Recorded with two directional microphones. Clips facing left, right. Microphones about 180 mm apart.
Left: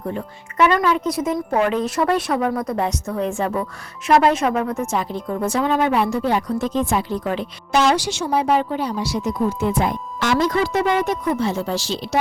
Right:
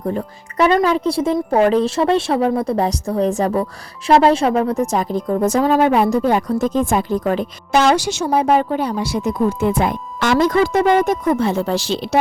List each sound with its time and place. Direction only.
0.1 s speech: 35° right (ahead or behind); by 12.2 s 60° right (ahead or behind)